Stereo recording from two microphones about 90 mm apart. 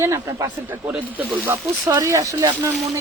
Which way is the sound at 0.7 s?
20° right (ahead or behind).